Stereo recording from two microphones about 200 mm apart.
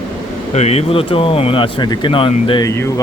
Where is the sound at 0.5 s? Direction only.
30° left (ahead or behind).